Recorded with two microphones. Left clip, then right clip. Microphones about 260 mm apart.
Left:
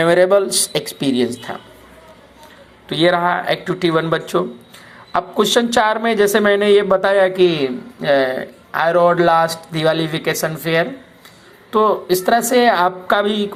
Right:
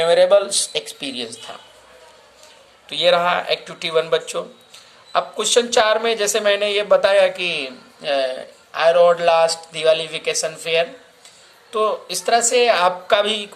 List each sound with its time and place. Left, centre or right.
0.0 s a woman's voice: centre
2.9 s a woman's voice: centre